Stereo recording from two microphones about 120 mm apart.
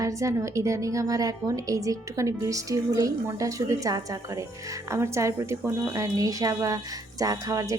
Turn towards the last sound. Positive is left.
turn(degrees=-30)  # may be behind; listen again after turning